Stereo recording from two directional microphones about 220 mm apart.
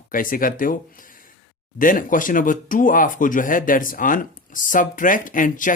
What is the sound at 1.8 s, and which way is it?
Speech, 40° left (ahead or behind).